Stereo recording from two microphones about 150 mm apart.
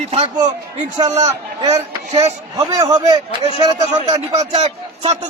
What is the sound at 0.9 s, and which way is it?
Speech, 45° right (ahead or behind).